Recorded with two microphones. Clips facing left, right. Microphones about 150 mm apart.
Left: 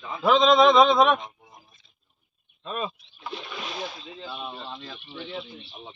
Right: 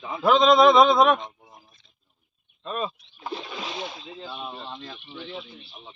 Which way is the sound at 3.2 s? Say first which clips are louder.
Right 3 dB; 40° right (ahead or behind).